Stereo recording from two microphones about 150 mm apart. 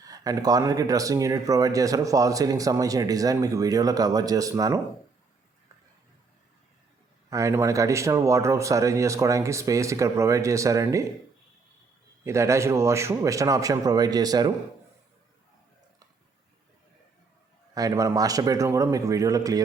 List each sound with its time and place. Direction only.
0.0 s speech: 25° right (ahead or behind)
7.3 s speech: 20° right (ahead or behind)
12.2 s speech: 20° right (ahead or behind)
17.7 s speech: 25° right (ahead or behind)